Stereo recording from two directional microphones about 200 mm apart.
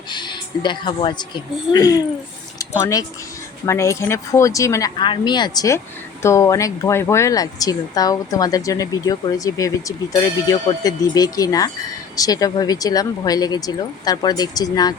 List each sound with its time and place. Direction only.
0.1 s a woman's voice: 20° left (ahead or behind)